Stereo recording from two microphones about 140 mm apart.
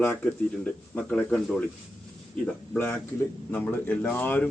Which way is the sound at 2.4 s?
15° left (ahead or behind).